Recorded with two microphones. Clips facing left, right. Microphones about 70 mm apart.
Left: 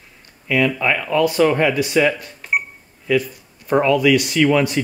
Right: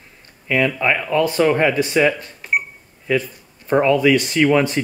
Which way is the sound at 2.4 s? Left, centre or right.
Centre.